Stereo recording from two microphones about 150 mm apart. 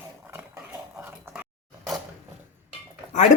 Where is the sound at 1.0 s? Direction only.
15° right (ahead or behind).